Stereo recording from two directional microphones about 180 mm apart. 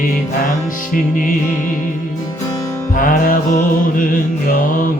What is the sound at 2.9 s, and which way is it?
Music, 50° left (ahead or behind).